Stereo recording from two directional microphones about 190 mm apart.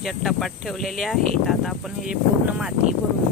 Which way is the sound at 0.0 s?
Centre (ahead or behind).